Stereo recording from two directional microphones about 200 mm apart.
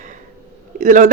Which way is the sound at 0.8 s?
40° right (ahead or behind).